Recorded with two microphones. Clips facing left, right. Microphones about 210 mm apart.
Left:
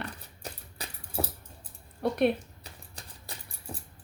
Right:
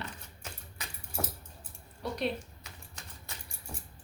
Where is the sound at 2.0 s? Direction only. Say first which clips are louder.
Left 8 dB; 55° left (ahead or behind).